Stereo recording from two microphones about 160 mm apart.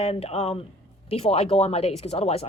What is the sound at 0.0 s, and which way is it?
Speech, 40° left (ahead or behind).